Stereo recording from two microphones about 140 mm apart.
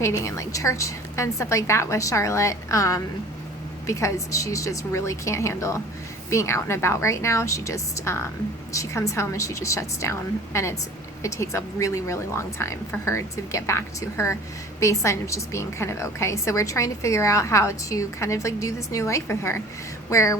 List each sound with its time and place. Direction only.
0.0 s a woman's voice: 20° left (ahead or behind)